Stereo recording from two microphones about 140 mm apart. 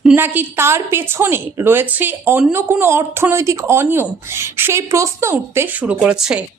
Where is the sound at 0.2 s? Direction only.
15° right (ahead or behind).